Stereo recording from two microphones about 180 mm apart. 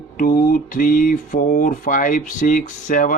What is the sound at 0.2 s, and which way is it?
Speech, 50° left (ahead or behind).